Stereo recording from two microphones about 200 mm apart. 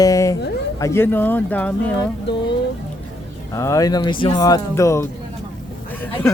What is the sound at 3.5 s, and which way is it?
Speech, 15° left (ahead or behind).